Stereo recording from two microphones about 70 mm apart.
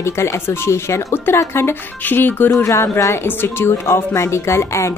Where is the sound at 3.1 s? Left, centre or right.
Left.